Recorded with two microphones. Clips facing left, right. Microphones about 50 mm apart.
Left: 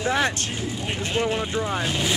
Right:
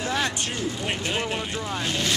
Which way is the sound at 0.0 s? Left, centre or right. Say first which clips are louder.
Left 4 dB; left.